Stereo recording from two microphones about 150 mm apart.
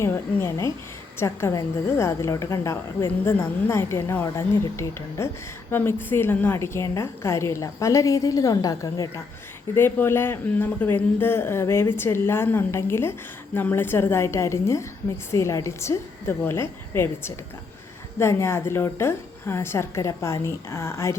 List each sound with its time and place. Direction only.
0.0 s a woman's voice: 15° left (ahead or behind)